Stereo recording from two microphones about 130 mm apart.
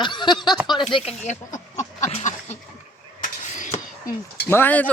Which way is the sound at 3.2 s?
75° left (ahead or behind).